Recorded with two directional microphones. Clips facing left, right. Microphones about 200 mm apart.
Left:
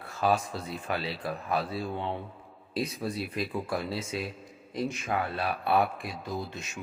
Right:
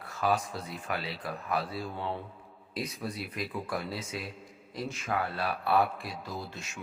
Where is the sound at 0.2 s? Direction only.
30° left (ahead or behind).